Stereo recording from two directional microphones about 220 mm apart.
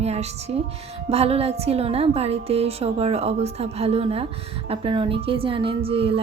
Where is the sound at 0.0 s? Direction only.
30° right (ahead or behind).